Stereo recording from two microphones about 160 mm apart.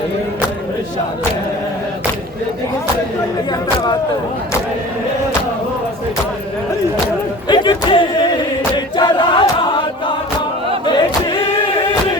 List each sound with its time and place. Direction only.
7.4 s choir: 30° left (ahead or behind)